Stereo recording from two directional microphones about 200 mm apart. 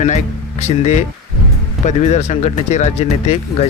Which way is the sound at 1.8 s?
35° left (ahead or behind).